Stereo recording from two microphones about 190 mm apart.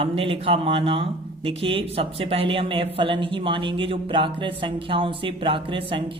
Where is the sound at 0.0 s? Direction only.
30° right (ahead or behind).